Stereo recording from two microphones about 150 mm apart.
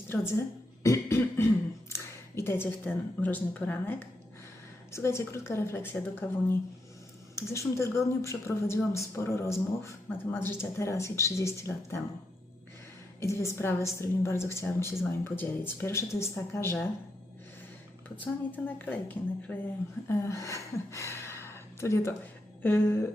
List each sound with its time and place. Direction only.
0.1 s a woman's voice: 20° left (ahead or behind)
13.1 s a woman's voice: 20° left (ahead or behind)
18.2 s a woman's voice: 10° left (ahead or behind)